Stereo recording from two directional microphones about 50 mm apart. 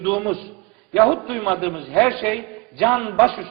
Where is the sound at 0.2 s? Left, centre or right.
Centre.